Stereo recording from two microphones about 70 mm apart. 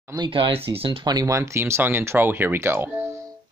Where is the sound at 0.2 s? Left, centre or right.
Right.